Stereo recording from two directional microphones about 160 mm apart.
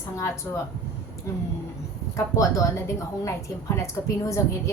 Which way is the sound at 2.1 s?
20° left (ahead or behind).